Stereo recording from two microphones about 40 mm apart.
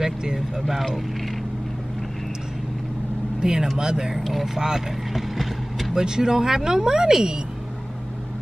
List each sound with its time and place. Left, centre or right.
0.0 s speech: centre
3.3 s speech: centre
4.2 s speech: centre
4.6 s speech: centre
5.1 s vehicle: centre
5.9 s speech: centre